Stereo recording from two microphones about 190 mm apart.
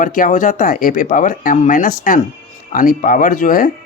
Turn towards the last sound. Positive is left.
turn(degrees=45)  # may be behind; listen again after turning